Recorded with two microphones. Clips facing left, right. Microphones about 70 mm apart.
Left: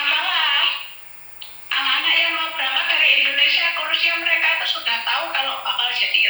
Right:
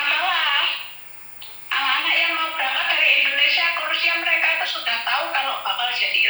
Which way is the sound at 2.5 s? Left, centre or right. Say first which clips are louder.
Even; right.